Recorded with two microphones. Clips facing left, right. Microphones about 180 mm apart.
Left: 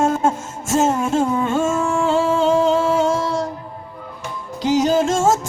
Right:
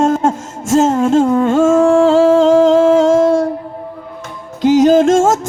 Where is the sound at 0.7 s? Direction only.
90° right.